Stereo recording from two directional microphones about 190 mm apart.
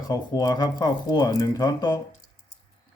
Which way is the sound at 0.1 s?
20° left (ahead or behind).